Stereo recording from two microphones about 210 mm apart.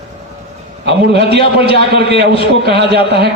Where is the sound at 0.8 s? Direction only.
50° right (ahead or behind).